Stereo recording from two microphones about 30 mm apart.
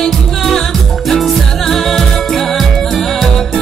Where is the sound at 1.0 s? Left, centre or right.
Centre.